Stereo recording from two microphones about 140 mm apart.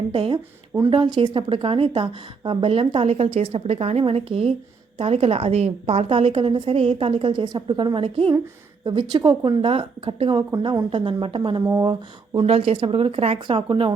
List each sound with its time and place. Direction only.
0.1 s a woman's voice: 35° right (ahead or behind)
11.6 s speech: 20° right (ahead or behind)
12.4 s a woman's voice: 45° right (ahead or behind)